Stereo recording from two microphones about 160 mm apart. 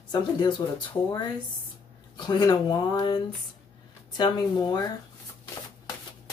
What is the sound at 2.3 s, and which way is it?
Speech, 25° left (ahead or behind).